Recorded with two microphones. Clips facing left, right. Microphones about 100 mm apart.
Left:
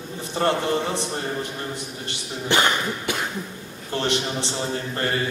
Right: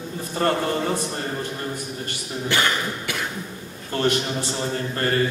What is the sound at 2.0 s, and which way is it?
A man's voice, 20° left (ahead or behind).